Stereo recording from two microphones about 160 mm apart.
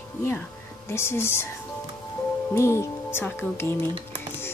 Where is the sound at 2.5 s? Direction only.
15° left (ahead or behind).